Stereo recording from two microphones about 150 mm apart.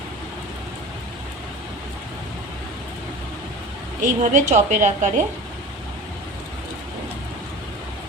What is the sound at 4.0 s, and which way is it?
A woman's voice, 60° right (ahead or behind).